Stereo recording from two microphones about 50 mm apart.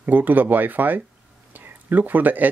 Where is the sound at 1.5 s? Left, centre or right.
Right.